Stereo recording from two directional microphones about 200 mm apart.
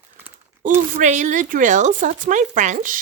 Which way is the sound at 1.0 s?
35° right (ahead or behind).